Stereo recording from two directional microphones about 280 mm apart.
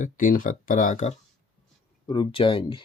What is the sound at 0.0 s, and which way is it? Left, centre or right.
Speech, left.